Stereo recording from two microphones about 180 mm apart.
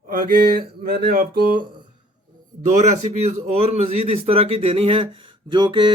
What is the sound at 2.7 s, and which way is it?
A man's voice, 40° right (ahead or behind).